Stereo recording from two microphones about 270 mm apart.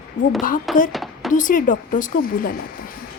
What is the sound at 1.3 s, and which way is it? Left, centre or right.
A woman's voice, left.